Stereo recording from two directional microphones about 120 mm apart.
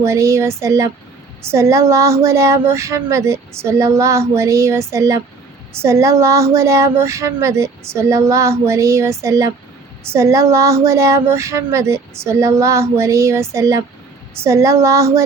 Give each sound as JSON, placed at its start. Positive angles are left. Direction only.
{"t": 0.0, "sound": "speech", "side_deg": -25}